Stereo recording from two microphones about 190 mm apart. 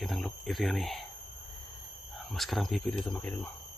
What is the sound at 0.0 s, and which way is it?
Speech, centre (ahead or behind).